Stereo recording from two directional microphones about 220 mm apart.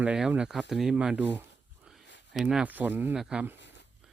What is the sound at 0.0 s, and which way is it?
Speech, 5° right (ahead or behind).